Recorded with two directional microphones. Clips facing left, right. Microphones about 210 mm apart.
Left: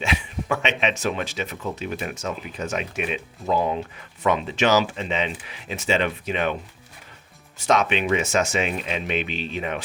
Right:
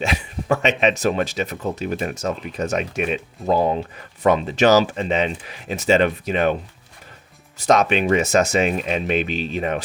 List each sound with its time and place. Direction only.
0.0 s speech: 40° right (ahead or behind)
7.6 s speech: 40° right (ahead or behind)